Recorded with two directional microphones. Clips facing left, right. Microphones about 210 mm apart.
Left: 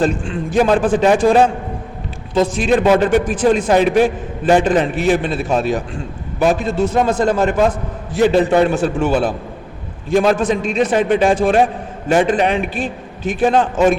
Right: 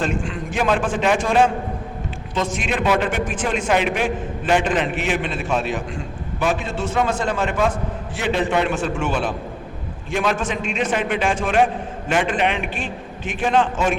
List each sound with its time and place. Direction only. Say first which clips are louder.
0.0 s a man's voice: left 6 dB; 35° left (ahead or behind)